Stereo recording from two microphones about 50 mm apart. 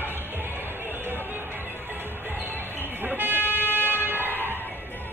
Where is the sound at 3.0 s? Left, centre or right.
Right.